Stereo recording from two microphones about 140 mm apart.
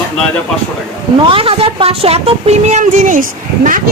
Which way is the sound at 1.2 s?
40° right (ahead or behind).